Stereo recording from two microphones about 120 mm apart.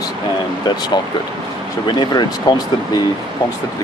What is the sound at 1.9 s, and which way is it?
Speech, 40° left (ahead or behind).